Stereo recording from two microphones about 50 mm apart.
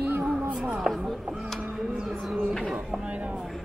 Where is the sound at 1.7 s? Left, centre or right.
Centre.